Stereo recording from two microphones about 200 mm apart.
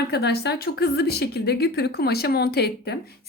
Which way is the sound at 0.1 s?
55° left (ahead or behind).